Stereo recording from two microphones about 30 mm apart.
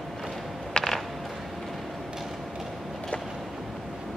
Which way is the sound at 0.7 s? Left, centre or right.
Left.